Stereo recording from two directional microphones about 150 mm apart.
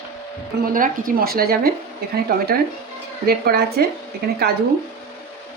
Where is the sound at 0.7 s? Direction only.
65° right (ahead or behind); by 3.8 s 90° right.